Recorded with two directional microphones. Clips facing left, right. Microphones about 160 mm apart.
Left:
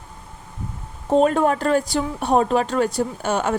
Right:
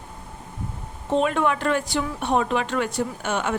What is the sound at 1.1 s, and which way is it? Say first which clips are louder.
A woman's voice: left 5 dB; 40° left (ahead or behind).